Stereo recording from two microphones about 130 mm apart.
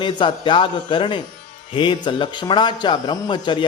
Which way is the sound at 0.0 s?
40° left (ahead or behind).